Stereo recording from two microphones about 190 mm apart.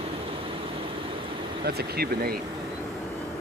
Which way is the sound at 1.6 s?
55° right (ahead or behind).